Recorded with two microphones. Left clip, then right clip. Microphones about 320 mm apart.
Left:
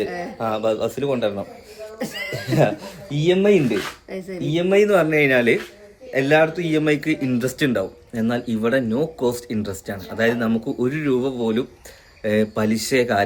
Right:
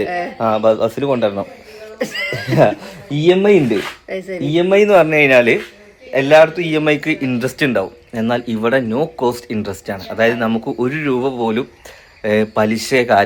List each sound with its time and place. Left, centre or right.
0.3 s speech: right
2.0 s speech: centre
2.3 s speech: centre
4.1 s a man's voice: centre
4.4 s a man's voice: centre